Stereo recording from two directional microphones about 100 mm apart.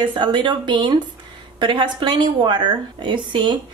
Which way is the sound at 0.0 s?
50° right (ahead or behind).